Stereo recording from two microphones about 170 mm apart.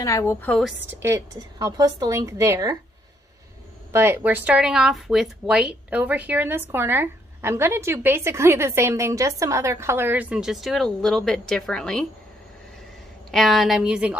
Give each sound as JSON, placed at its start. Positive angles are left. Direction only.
{"t": 0.0, "sound": "a woman's voice", "side_deg": 15}
{"t": 0.8, "sound": "a woman's voice", "side_deg": -15}
{"t": 3.9, "sound": "speech", "side_deg": -15}
{"t": 13.3, "sound": "a woman's voice", "side_deg": 0}